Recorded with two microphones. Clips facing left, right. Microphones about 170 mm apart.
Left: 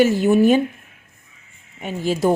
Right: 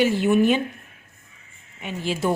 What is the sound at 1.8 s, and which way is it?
Speech, 40° left (ahead or behind).